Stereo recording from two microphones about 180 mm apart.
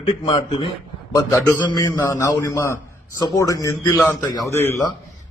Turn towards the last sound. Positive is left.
turn(degrees=15)  # may be behind; listen again after turning